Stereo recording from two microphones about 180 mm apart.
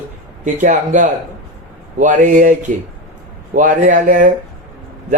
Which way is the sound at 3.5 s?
45° right (ahead or behind).